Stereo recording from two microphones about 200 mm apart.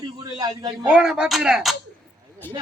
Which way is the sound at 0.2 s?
20° right (ahead or behind).